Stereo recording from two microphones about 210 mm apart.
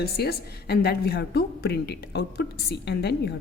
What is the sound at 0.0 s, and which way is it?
A woman's voice, 50° left (ahead or behind).